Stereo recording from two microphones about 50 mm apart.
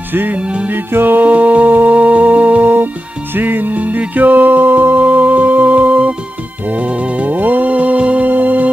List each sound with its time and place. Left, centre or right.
0.1 s music: right